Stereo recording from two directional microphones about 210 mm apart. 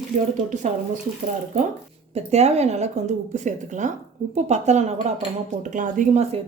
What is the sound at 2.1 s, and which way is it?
A woman's voice, 30° right (ahead or behind).